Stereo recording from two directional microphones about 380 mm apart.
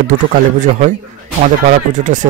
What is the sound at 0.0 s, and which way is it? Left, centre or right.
Speech, centre.